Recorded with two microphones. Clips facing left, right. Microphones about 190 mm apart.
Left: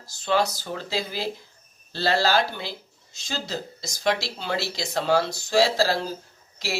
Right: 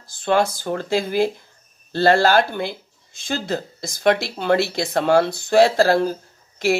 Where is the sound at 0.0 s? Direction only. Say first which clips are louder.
Right 5 dB; 55° right (ahead or behind).